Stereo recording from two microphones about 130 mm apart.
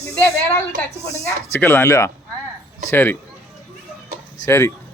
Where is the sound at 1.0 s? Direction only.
55° left (ahead or behind).